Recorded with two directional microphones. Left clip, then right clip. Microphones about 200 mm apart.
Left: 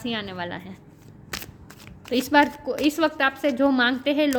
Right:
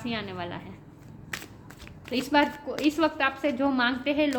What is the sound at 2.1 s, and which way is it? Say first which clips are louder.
A woman's voice: left 5 dB; 50° left (ahead or behind).